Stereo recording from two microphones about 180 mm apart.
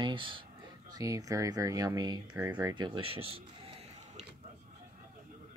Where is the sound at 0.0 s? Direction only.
25° right (ahead or behind).